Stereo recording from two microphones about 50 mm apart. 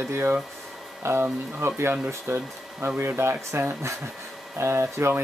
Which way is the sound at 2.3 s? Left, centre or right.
Right.